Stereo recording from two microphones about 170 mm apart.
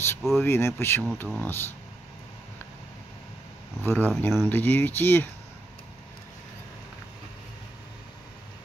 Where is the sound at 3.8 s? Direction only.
10° left (ahead or behind).